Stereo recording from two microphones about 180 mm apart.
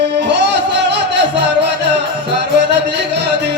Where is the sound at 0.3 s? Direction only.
75° right (ahead or behind).